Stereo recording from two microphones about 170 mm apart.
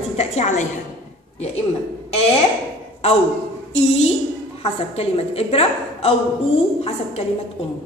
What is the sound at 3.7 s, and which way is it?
A woman's voice, 35° left (ahead or behind).